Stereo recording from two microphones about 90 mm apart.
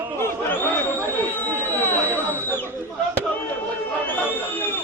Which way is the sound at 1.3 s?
20° left (ahead or behind).